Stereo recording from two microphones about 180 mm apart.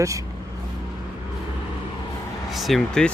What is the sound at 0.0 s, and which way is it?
Speech, 15° right (ahead or behind).